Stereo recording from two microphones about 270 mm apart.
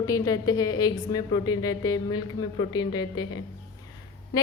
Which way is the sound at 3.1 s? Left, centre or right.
Left.